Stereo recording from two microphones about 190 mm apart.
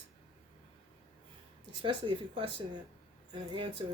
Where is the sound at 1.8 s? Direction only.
25° right (ahead or behind).